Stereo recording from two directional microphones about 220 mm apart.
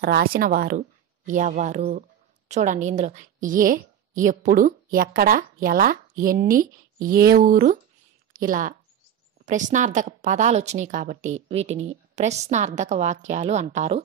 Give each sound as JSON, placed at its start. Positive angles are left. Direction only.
{"t": 0.0, "sound": "a woman's voice", "side_deg": -45}